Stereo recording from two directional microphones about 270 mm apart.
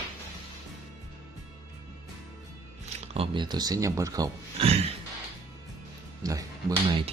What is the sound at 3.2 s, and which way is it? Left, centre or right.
Speech, centre.